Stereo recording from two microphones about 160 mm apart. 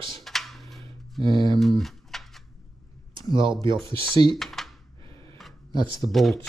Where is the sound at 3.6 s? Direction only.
35° right (ahead or behind).